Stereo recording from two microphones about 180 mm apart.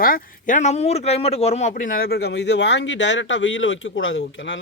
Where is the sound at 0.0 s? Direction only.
50° left (ahead or behind).